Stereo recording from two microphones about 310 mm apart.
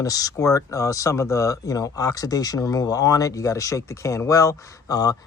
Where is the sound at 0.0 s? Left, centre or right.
Centre.